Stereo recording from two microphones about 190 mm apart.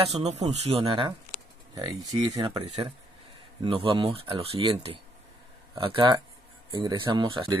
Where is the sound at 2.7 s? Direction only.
35° right (ahead or behind).